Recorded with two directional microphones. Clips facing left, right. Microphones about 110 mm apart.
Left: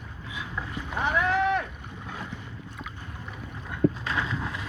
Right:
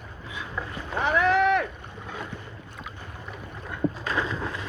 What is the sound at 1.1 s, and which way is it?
Boat, 80° right.